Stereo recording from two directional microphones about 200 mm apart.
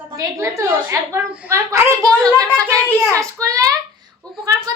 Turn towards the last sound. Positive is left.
turn(degrees=-20)  # may be behind; listen again after turning